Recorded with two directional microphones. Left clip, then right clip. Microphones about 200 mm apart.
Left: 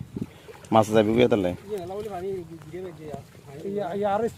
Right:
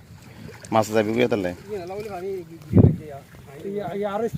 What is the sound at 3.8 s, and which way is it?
Speech, 40° right (ahead or behind).